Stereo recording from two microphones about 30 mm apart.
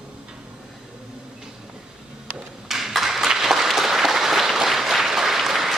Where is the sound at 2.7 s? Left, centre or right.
Centre.